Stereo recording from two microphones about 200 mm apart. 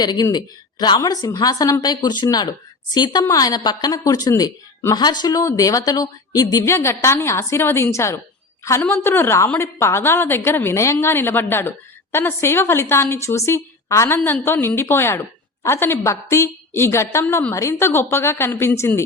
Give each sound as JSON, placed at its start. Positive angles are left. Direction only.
{"t": 0.0, "sound": "a woman's voice", "side_deg": 20}